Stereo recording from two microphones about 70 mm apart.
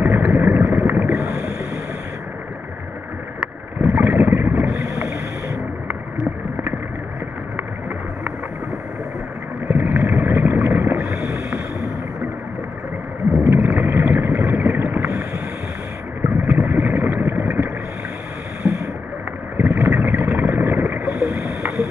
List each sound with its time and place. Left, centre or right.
0.0 s boat: right
3.8 s vehicle: right
4.7 s boat: right
9.7 s a sound: right
13.4 s boat: right
16.4 s boat: right
18.6 s boat: right
19.5 s vehicle: right